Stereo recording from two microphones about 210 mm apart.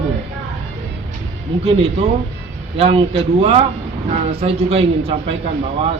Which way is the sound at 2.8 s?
30° right (ahead or behind).